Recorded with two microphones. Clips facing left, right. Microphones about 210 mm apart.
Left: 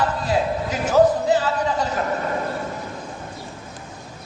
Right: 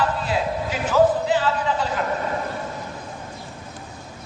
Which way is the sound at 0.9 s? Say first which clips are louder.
Left 2 dB; 40° left (ahead or behind).